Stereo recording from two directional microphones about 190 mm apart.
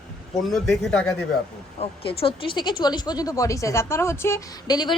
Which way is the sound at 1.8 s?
30° left (ahead or behind).